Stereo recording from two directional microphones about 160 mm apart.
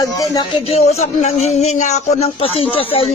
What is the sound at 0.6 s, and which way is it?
Speech, 40° left (ahead or behind).